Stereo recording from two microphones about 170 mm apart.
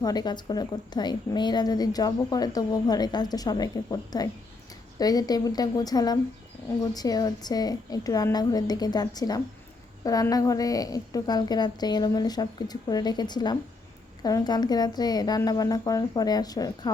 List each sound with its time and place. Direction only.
0.0 s a woman's voice: 25° left (ahead or behind)